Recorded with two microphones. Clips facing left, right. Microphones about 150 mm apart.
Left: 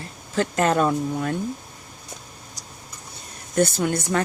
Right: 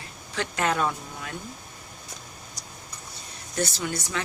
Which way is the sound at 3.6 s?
55° left (ahead or behind).